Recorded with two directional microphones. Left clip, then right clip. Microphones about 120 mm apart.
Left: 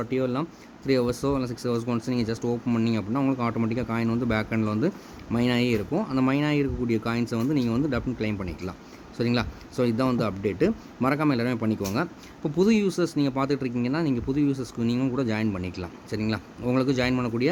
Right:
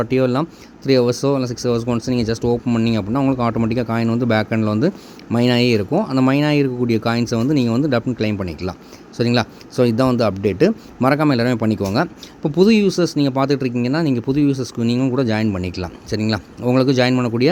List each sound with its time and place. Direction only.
0.0 s speech: 55° right (ahead or behind)
0.9 s speech: 40° right (ahead or behind)